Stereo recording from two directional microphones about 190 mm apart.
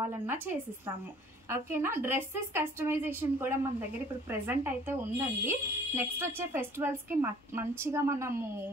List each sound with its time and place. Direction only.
0.0 s speech: 10° right (ahead or behind)